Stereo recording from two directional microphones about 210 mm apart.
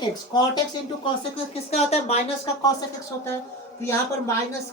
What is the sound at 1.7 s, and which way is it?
Speech, 30° left (ahead or behind).